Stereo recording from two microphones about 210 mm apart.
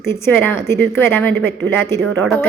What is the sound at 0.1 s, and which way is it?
A woman's voice, 10° left (ahead or behind).